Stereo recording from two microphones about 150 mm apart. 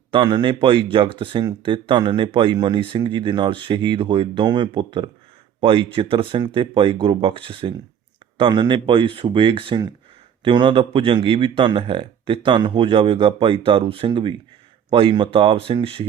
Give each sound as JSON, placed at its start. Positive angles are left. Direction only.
{"t": 0.1, "sound": "speech", "side_deg": -30}